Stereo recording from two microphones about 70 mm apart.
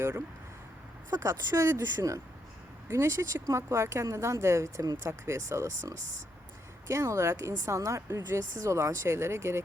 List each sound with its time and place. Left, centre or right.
1.2 s speech: right
7.6 s speech: right